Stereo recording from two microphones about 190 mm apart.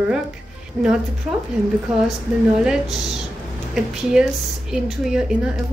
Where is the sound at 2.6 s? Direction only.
Centre (ahead or behind).